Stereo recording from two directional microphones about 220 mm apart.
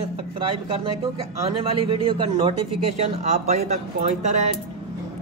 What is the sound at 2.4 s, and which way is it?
Speech, 25° right (ahead or behind).